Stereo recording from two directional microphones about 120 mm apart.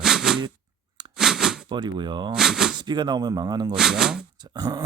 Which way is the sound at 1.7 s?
40° right (ahead or behind).